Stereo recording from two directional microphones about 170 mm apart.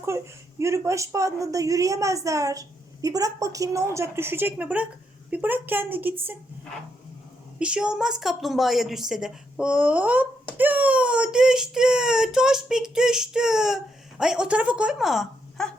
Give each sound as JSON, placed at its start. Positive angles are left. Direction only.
{"t": 0.6, "sound": "a woman's voice", "side_deg": -15}
{"t": 7.6, "sound": "speech", "side_deg": -5}